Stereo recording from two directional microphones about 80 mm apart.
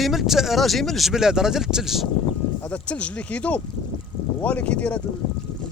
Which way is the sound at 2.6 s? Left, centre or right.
Centre.